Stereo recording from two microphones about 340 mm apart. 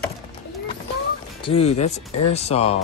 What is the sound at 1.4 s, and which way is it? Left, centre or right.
Speech, centre.